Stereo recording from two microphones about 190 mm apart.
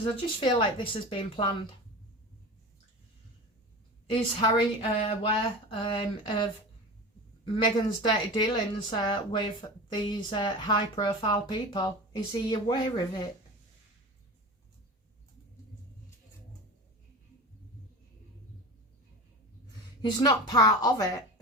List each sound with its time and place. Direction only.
0.2 s speech: 25° left (ahead or behind)
4.0 s speech: 25° left (ahead or behind)
20.0 s speech: 20° left (ahead or behind)